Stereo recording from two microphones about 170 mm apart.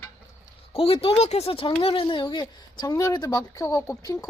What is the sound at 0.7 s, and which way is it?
Speech, 35° left (ahead or behind).